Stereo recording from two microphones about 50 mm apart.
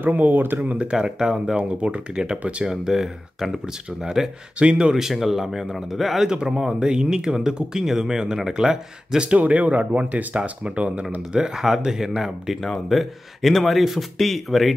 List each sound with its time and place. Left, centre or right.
0.0 s speech: right
1.2 s speech: centre
1.6 s speech: right
4.6 s speech: right
5.1 s speech: centre
6.2 s speech: centre
9.4 s speech: right
11.3 s speech: centre
12.6 s speech: centre